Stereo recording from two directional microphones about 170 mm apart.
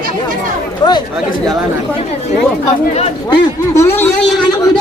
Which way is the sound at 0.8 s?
25° left (ahead or behind).